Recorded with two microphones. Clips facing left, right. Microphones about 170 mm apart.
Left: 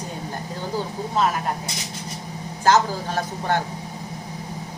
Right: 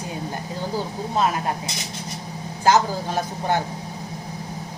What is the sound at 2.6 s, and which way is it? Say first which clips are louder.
Speech: even; 15° right (ahead or behind).